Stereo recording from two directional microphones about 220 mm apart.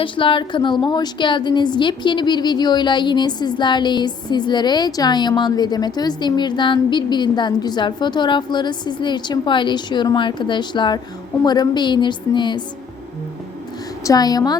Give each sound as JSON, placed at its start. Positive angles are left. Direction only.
{"t": 0.0, "sound": "a woman's voice", "side_deg": 25}
{"t": 14.0, "sound": "a woman's voice", "side_deg": 15}